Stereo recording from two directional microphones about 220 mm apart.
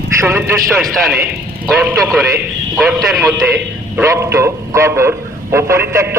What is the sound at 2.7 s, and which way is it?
Speech, centre (ahead or behind).